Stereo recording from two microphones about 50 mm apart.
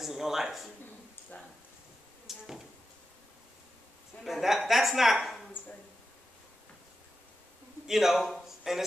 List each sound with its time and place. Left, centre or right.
0.0 s speech: centre
1.3 s speech: left
2.2 s speech: centre
4.2 s a woman's voice: centre
7.8 s a man's voice: centre
8.5 s a sound: centre